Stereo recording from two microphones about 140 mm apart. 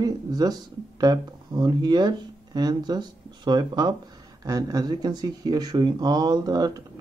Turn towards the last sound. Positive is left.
turn(degrees=-30)  # may be behind; listen again after turning